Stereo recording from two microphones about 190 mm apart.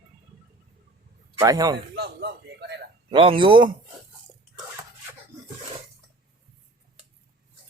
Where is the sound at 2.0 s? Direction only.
60° right (ahead or behind).